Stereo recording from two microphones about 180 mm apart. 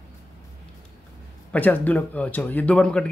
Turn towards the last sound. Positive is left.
turn(degrees=5)  # may be behind; listen again after turning